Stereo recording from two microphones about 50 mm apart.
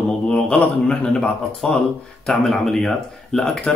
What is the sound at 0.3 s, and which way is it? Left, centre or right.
A man's voice, centre.